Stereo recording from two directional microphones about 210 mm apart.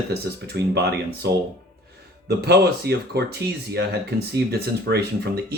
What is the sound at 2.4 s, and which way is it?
Speech, 50° right (ahead or behind).